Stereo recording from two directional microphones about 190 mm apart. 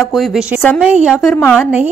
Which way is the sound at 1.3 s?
10° left (ahead or behind).